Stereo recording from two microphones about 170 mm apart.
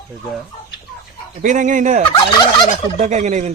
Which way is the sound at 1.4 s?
50° right (ahead or behind).